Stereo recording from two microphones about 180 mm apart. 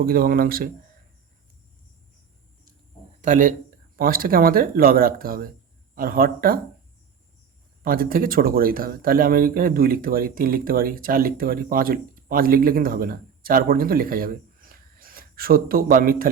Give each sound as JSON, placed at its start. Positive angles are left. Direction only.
{"t": 0.0, "sound": "speech", "side_deg": -55}
{"t": 3.2, "sound": "a man's voice", "side_deg": -45}
{"t": 7.9, "sound": "speech", "side_deg": -55}